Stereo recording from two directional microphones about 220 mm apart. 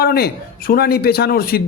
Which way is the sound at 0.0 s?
45° left (ahead or behind).